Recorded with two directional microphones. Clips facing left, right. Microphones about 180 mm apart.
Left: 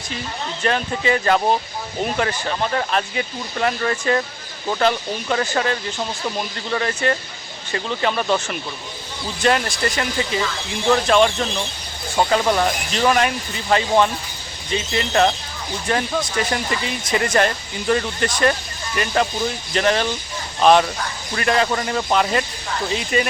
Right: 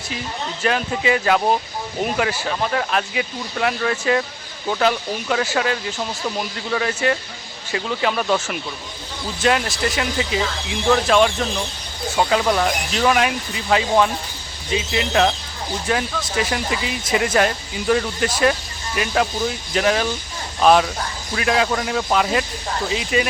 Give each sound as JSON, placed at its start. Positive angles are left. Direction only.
{"t": 0.6, "sound": "speech", "side_deg": -5}